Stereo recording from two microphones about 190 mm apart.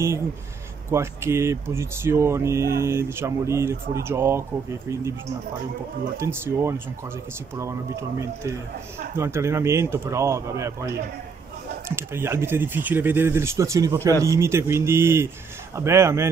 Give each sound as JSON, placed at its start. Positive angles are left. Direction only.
{"t": 0.8, "sound": "speech", "side_deg": -15}
{"t": 6.1, "sound": "speech", "side_deg": -15}